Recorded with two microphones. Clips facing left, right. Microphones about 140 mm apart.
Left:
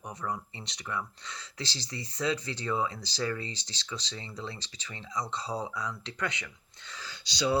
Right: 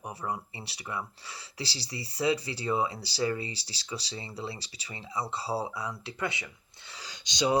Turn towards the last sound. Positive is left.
turn(degrees=-20)  # may be behind; listen again after turning